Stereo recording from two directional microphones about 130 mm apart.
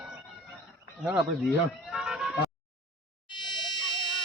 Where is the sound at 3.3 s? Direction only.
35° left (ahead or behind).